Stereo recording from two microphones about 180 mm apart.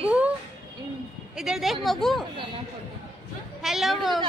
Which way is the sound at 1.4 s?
Centre (ahead or behind).